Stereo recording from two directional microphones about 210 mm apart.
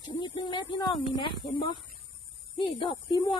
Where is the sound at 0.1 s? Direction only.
20° left (ahead or behind).